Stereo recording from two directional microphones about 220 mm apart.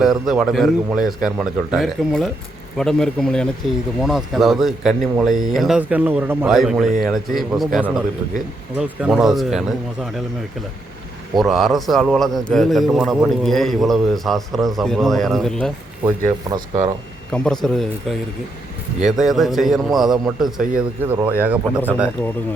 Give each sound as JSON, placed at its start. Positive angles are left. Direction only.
{"t": 0.0, "sound": "a man's voice", "side_deg": 0}
{"t": 11.3, "sound": "a man's voice", "side_deg": 0}
{"t": 16.5, "sound": "speech", "side_deg": -15}
{"t": 17.3, "sound": "a man's voice", "side_deg": 5}